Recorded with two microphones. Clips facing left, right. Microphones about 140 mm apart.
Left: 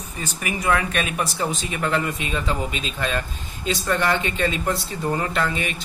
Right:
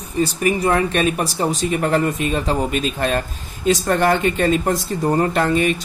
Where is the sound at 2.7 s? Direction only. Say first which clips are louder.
Right 6 dB; 50° right (ahead or behind).